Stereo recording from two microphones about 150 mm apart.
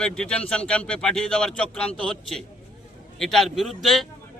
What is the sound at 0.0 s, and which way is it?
A man's voice, 5° left (ahead or behind).